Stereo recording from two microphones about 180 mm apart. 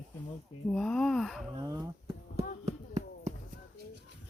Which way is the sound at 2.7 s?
35° right (ahead or behind).